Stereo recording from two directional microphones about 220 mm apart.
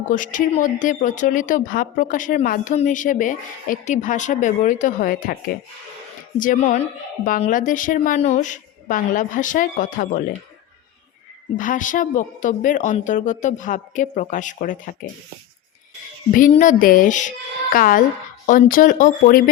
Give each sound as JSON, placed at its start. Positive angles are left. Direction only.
{"t": 0.1, "sound": "speech", "side_deg": 35}
{"t": 6.4, "sound": "speech", "side_deg": 35}
{"t": 11.5, "sound": "speech", "side_deg": 35}
{"t": 16.3, "sound": "speech", "side_deg": 35}